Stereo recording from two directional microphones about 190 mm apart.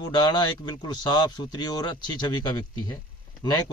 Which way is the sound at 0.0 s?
20° left (ahead or behind).